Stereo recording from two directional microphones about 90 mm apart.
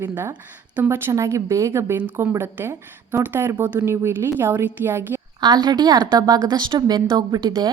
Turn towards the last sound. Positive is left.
turn(degrees=-50)  # may be behind; listen again after turning